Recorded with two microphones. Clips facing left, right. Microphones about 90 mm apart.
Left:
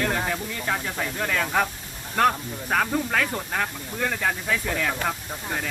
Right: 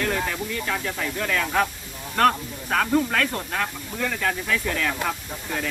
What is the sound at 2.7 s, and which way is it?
Speech, 10° left (ahead or behind).